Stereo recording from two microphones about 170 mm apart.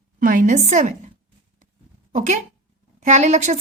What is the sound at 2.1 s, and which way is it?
A woman's voice, 45° right (ahead or behind).